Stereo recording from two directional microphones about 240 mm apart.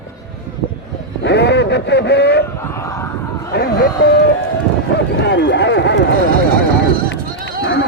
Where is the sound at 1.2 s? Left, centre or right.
Left.